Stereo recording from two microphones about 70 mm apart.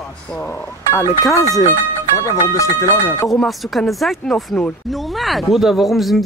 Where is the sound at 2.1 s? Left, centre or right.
Left.